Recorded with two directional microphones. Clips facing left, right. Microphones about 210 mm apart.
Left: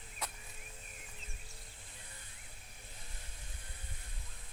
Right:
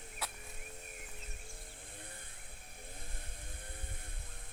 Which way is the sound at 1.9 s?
55° right (ahead or behind).